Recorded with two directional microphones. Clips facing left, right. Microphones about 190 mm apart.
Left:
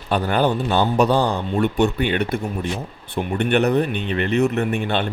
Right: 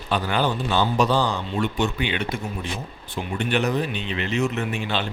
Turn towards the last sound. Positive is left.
turn(degrees=55)  # may be behind; listen again after turning